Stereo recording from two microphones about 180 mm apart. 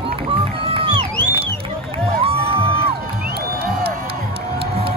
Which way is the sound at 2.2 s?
30° right (ahead or behind).